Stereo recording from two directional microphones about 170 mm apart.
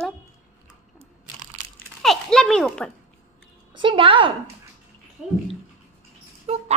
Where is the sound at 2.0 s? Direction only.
Centre (ahead or behind).